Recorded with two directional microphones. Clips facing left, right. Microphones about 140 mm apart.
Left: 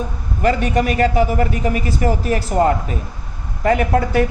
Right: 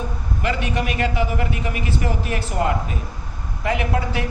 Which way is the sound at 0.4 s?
45° left (ahead or behind).